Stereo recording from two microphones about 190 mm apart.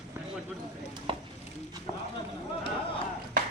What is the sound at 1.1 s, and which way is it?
Chopping, 25° right (ahead or behind).